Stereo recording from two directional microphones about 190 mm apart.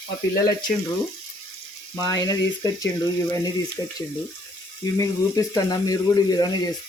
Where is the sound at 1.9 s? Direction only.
20° left (ahead or behind).